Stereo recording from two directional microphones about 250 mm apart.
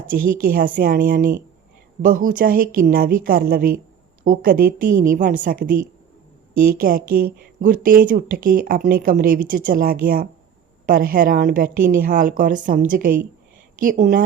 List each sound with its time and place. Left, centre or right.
0.2 s speech: right
0.8 s a woman's voice: right
4.9 s speech: right
5.1 s a woman's voice: right
6.5 s speech: right
6.7 s a woman's voice: right